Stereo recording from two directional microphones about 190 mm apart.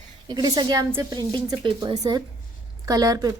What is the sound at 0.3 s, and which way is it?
Speech, 20° right (ahead or behind).